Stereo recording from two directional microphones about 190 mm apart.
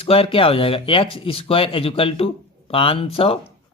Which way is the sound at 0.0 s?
30° left (ahead or behind).